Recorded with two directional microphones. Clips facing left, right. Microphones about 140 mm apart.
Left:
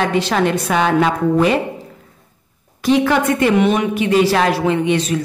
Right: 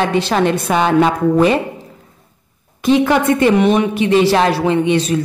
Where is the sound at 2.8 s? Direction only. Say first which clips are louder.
Right 2 dB; 25° right (ahead or behind).